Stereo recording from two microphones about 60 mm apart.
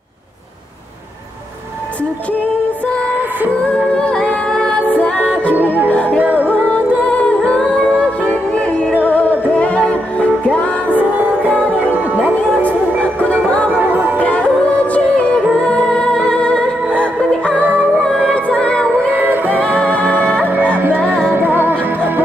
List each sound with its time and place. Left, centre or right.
3.9 s music: centre
6.1 s music: right
6.7 s music: left
11.0 s music: right
14.2 s music: left
18.3 s music: left
19.1 s music: right